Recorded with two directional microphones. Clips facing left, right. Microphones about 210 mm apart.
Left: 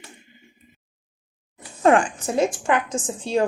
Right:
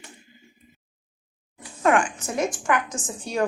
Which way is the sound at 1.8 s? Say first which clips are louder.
Left 4 dB; 30° left (ahead or behind).